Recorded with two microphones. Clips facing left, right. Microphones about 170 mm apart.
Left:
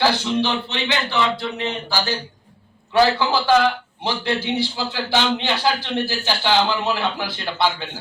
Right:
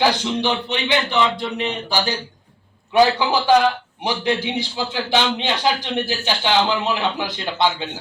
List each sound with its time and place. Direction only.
0.0 s a man's voice: 15° right (ahead or behind)